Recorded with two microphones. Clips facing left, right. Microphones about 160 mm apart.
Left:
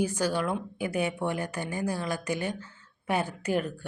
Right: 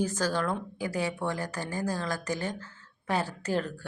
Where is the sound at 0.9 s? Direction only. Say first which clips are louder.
Left 2 dB; 20° left (ahead or behind).